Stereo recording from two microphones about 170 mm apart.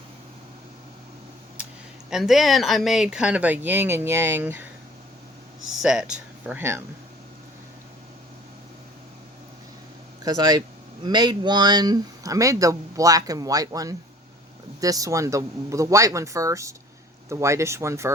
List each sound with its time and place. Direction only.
1.6 s a sound: 5° right (ahead or behind)
2.0 s speech: centre (ahead or behind)
5.7 s speech: 5° right (ahead or behind)
10.2 s speech: 25° right (ahead or behind)